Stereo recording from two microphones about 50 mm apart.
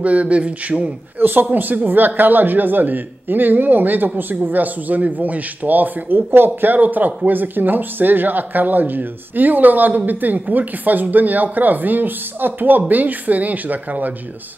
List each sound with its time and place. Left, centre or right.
0.0 s speech: right
1.2 s speech: right